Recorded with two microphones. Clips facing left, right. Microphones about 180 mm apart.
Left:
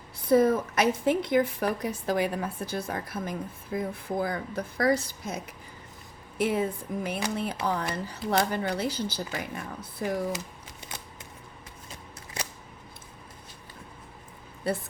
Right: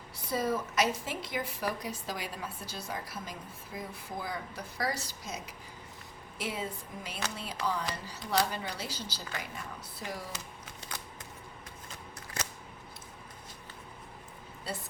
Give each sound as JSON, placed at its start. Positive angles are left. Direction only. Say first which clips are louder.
{"t": 0.3, "sound": "a woman's voice", "louder": "left 10 dB", "side_deg": 55}
{"t": 14.7, "sound": "a woman's voice", "louder": "left 10 dB", "side_deg": 55}